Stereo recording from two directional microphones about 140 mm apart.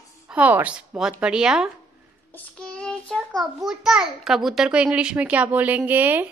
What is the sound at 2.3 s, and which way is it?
A child's voice, 5° left (ahead or behind).